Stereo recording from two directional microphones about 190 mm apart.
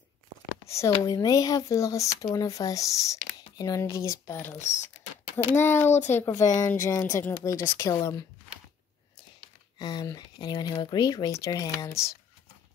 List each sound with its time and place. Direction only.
0.7 s speech: 15° left (ahead or behind)
5.6 s speech: 15° left (ahead or behind)
9.8 s speech: 20° left (ahead or behind)